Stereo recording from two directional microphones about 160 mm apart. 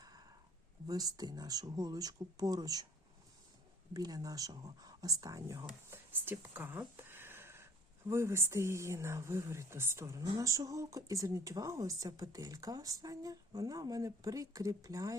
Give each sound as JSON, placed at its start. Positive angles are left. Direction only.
{"t": 0.0, "sound": "a sound", "side_deg": -25}
{"t": 0.9, "sound": "speech", "side_deg": -25}
{"t": 3.9, "sound": "speech", "side_deg": -25}